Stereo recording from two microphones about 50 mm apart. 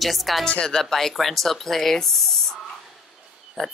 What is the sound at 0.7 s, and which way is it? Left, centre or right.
Speech, centre.